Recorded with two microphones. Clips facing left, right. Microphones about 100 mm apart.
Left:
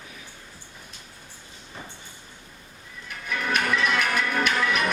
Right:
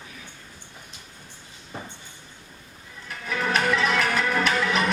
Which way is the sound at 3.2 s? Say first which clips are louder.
Right 2 dB; 35° right (ahead or behind).